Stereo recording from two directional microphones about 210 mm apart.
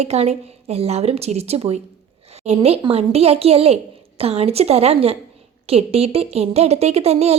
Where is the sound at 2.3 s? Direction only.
30° right (ahead or behind).